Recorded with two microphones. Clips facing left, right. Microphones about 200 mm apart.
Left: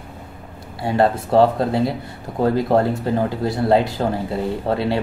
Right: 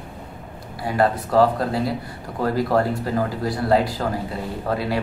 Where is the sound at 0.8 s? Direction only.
25° left (ahead or behind).